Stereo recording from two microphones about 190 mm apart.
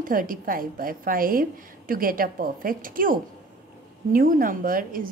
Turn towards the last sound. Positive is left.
turn(degrees=-45)  # may be behind; listen again after turning